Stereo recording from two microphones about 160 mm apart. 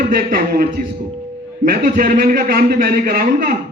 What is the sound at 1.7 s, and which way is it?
A man's voice, 60° right (ahead or behind).